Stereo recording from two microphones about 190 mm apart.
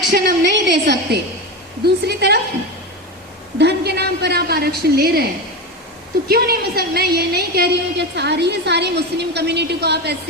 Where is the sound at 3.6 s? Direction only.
60° right (ahead or behind).